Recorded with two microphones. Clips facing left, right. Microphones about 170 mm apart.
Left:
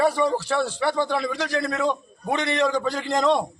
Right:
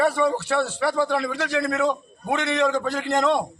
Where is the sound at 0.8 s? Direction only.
Centre (ahead or behind).